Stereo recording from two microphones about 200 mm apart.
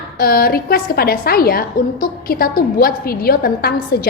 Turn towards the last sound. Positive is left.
turn(degrees=50)  # may be behind; listen again after turning